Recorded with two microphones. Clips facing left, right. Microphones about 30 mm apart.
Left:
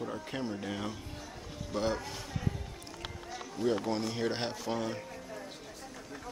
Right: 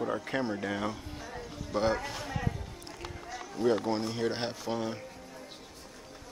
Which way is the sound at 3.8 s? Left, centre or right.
Centre.